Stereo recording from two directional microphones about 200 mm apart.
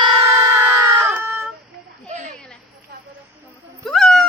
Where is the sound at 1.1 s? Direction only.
10° right (ahead or behind).